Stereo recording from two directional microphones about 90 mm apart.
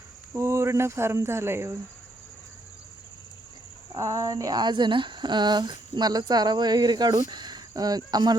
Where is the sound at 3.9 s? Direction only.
35° right (ahead or behind).